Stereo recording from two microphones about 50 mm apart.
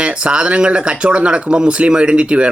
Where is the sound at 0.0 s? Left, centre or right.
Centre.